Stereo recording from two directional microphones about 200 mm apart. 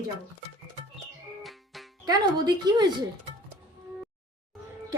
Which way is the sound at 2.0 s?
20° right (ahead or behind).